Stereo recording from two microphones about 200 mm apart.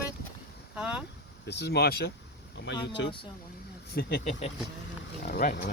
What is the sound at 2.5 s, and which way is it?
Speech, 60° left (ahead or behind).